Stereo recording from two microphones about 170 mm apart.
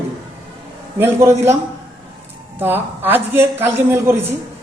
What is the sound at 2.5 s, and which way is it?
A man's voice, 10° right (ahead or behind).